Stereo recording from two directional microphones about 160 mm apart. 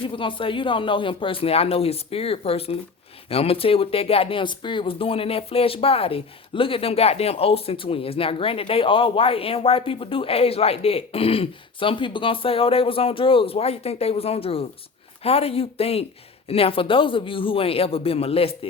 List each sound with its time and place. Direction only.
0.2 s speech: 30° left (ahead or behind)